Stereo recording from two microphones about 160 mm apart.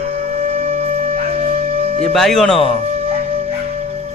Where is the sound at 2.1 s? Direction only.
Centre (ahead or behind).